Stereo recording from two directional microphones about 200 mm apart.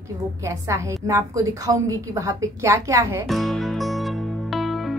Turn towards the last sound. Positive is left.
turn(degrees=0)  # may be behind; listen again after turning